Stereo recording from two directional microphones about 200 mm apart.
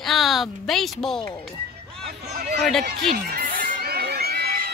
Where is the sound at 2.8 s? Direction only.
50° right (ahead or behind).